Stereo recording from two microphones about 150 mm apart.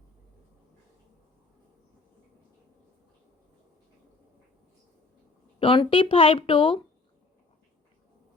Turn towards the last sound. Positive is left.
turn(degrees=35)  # may be behind; listen again after turning